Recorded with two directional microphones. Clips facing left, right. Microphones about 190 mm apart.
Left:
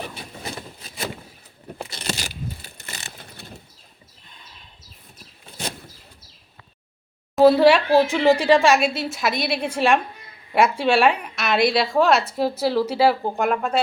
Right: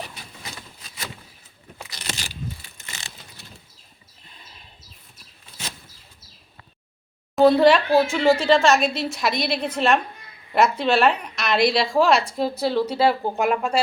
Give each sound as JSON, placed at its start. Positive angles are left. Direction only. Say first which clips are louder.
{"t": 0.2, "sound": "vehicle", "louder": "left 7 dB", "side_deg": 35}
{"t": 1.8, "sound": "crunch", "louder": "left 5 dB", "side_deg": 30}
{"t": 2.6, "sound": "vehicle", "louder": "left 4 dB", "side_deg": 35}
{"t": 3.2, "sound": "mechanisms", "louder": "left 5 dB", "side_deg": 60}
{"t": 7.3, "sound": "a woman's voice", "louder": "left 1 dB", "side_deg": 5}